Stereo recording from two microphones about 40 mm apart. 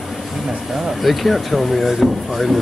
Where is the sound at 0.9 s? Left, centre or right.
Centre.